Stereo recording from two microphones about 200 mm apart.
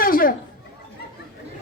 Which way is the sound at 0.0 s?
45° left (ahead or behind).